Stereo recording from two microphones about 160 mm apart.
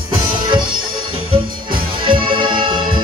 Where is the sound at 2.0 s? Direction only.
30° right (ahead or behind).